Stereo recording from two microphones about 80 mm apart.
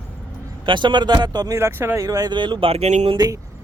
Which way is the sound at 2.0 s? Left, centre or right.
Right.